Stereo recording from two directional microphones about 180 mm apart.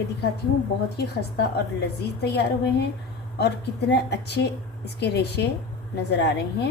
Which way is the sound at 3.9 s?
70° left (ahead or behind).